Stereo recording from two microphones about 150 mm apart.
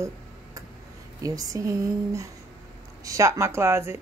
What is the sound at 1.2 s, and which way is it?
A woman's voice, 25° right (ahead or behind).